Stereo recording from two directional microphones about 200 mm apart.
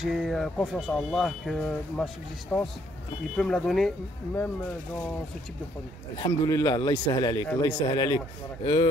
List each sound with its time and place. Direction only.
0.0 s speech: centre (ahead or behind)
6.1 s speech: 20° left (ahead or behind)